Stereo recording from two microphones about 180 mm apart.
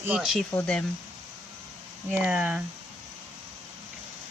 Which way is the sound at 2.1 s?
5° right (ahead or behind).